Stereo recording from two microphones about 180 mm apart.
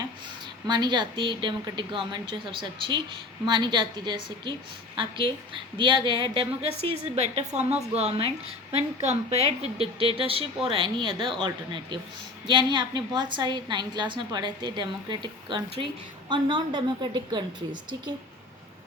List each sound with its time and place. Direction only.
0.7 s a woman's voice: 25° right (ahead or behind)